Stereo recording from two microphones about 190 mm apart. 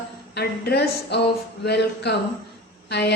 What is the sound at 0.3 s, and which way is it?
Speech, 60° left (ahead or behind).